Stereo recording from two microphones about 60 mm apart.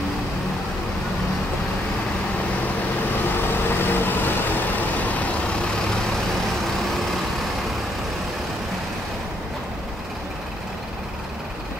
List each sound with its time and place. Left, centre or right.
3.3 s vehicle: left